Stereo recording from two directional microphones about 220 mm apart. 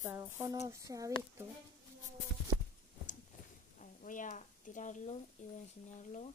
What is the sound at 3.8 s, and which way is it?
Speech, 35° left (ahead or behind).